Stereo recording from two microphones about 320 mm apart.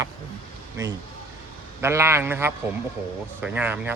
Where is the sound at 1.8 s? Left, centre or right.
Centre.